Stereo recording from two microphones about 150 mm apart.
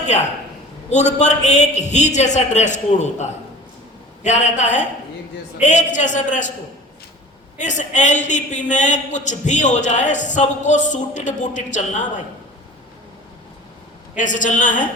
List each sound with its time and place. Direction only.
0.9 s a man's voice: 50° left (ahead or behind)
7.6 s a man's voice: 55° left (ahead or behind)
14.2 s a man's voice: 55° left (ahead or behind)